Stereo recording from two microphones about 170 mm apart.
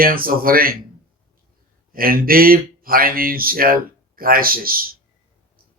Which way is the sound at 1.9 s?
60° right (ahead or behind).